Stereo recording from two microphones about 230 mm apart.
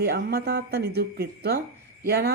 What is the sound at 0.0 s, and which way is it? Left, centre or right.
Speech, right.